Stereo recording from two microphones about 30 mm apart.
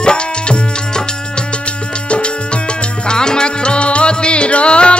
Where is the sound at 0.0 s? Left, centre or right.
Left.